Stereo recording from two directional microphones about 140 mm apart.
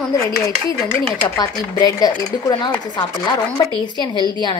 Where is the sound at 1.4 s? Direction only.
30° left (ahead or behind).